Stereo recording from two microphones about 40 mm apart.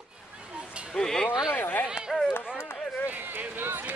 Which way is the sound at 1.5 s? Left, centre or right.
Left.